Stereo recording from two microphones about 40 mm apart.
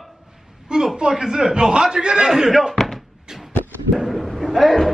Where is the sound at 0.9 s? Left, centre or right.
Centre.